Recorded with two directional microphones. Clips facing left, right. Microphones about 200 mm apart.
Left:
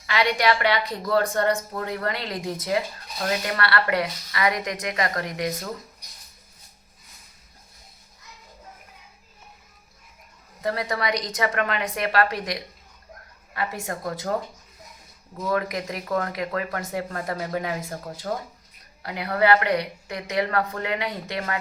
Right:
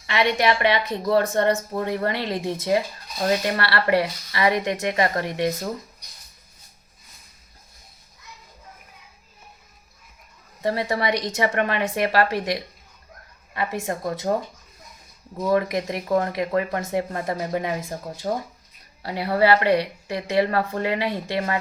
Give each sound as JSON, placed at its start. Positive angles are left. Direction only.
{"t": 0.0, "sound": "speech", "side_deg": -25}
{"t": 10.6, "sound": "speech", "side_deg": -25}
{"t": 15.4, "sound": "speech", "side_deg": -25}